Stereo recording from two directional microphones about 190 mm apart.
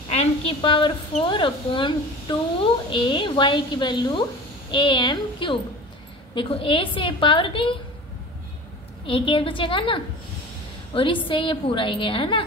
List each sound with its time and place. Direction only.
0.1 s a woman's voice: 30° left (ahead or behind)
9.0 s a woman's voice: 25° left (ahead or behind)